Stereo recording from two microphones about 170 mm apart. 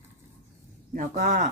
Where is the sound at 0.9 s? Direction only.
50° right (ahead or behind).